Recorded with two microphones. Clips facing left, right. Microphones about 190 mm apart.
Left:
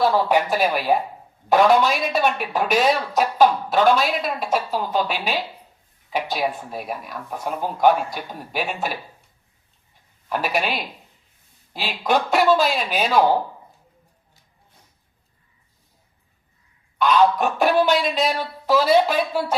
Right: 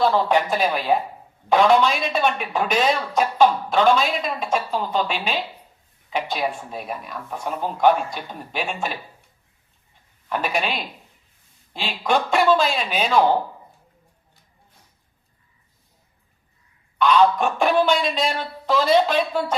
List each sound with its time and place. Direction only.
0.0 s speech: 10° left (ahead or behind)
10.2 s speech: 10° left (ahead or behind)
17.0 s speech: 10° left (ahead or behind)